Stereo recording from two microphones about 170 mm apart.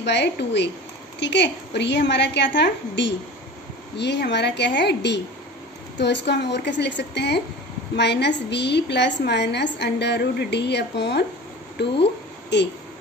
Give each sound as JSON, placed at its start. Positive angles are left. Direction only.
{"t": 0.0, "sound": "a woman's voice", "side_deg": 90}
{"t": 12.5, "sound": "a woman's voice", "side_deg": 90}